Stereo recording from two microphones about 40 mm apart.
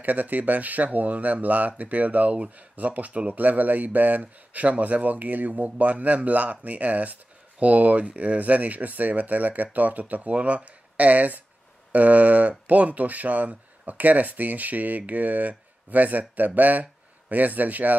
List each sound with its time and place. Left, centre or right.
0.0 s speech: right